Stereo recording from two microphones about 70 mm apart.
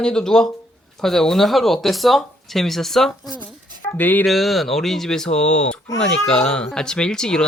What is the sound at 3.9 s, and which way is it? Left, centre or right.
Speech, left.